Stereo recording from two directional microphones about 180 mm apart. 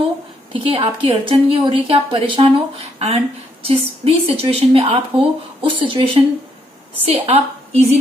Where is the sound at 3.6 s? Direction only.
30° right (ahead or behind).